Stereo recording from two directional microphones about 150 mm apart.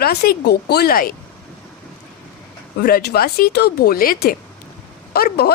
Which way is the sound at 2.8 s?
90° left.